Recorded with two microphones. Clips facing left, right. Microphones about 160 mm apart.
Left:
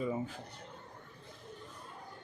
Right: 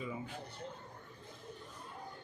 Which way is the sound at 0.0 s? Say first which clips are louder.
Left 7 dB; 40° left (ahead or behind).